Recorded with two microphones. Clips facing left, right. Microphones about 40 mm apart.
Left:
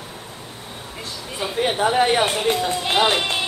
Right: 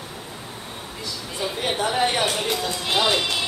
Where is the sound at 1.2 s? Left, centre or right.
Centre.